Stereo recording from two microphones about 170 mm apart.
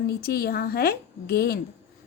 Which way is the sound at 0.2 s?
65° left (ahead or behind).